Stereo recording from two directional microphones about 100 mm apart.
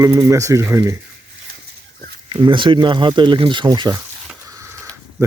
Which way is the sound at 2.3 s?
50° right (ahead or behind).